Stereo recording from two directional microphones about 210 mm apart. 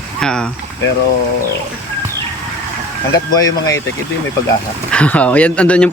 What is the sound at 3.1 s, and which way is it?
Speech, 15° left (ahead or behind).